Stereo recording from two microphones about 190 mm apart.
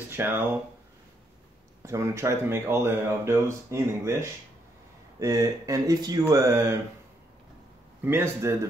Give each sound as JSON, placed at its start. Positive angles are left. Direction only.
{"t": 0.1, "sound": "speech", "side_deg": -10}
{"t": 1.8, "sound": "speech", "side_deg": -15}
{"t": 8.0, "sound": "speech", "side_deg": -10}